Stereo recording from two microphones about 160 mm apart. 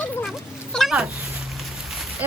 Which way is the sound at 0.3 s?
Centre (ahead or behind).